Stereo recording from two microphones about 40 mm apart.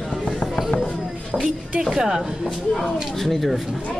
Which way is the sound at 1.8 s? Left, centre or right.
Centre.